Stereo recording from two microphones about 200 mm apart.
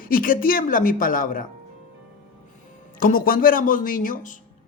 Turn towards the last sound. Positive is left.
turn(degrees=40)  # may be behind; listen again after turning